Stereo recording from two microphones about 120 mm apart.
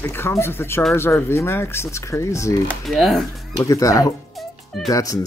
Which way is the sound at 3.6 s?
30° left (ahead or behind).